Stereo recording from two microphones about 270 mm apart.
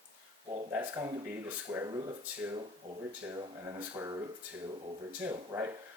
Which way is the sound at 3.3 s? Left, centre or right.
Centre.